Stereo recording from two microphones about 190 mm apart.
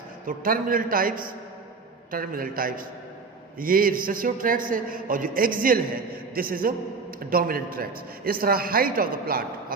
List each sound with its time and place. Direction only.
0.3 s a man's voice: 50° right (ahead or behind)